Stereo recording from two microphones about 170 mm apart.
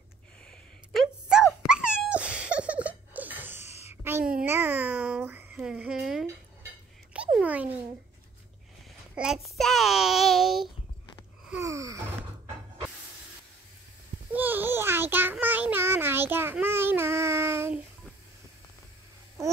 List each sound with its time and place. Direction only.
0.5 s cat: centre (ahead or behind)
3.9 s a sound: 15° right (ahead or behind)
7.3 s a sound: 10° right (ahead or behind)
9.1 s child singing: 5° right (ahead or behind)
11.6 s gasp: 20° right (ahead or behind)
14.3 s babbling: 10° right (ahead or behind)